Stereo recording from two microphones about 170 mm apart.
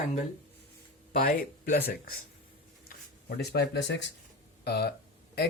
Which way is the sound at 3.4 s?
80° left.